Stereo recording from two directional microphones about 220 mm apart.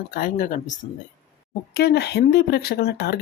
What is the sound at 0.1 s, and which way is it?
Speech, 40° left (ahead or behind).